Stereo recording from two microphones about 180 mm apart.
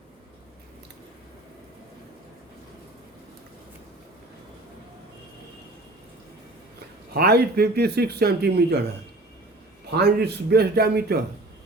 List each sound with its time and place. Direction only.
7.1 s speech: 60° right (ahead or behind)
9.9 s speech: 65° right (ahead or behind)